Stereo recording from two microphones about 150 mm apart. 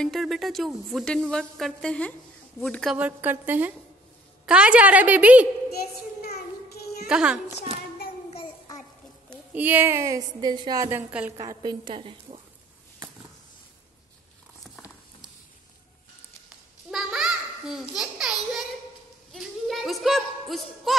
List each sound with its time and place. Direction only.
0.0 s a woman's voice: centre (ahead or behind)
3.0 s a woman's voice: 10° right (ahead or behind)
6.3 s child singing: 90° left
7.1 s a woman's voice: 5° right (ahead or behind)
9.5 s a woman's voice: 10° right (ahead or behind); by 10.9 s 30° right (ahead or behind)
10.9 s a woman's voice: 10° right (ahead or behind)
11.3 s a woman's voice: 25° right (ahead or behind)
16.4 s babbling: 5° right (ahead or behind)
19.3 s a sound: centre (ahead or behind)